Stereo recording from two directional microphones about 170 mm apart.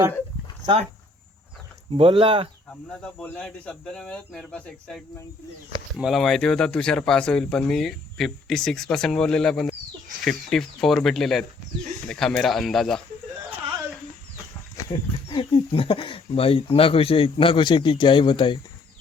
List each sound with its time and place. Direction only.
0.6 s speech: 30° right (ahead or behind)
1.9 s speech: 35° right (ahead or behind)
3.0 s speech: 5° left (ahead or behind)
14.8 s speech: 25° left (ahead or behind)